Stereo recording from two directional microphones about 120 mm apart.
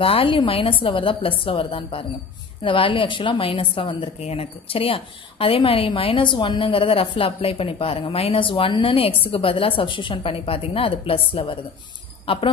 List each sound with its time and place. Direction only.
0.0 s a woman's voice: 50° left (ahead or behind)